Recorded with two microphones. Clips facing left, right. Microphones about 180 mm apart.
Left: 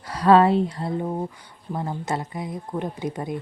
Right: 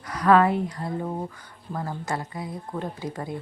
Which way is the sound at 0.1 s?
30° left (ahead or behind).